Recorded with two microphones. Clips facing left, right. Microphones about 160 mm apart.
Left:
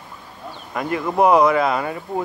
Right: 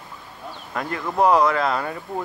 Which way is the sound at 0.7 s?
10° left (ahead or behind).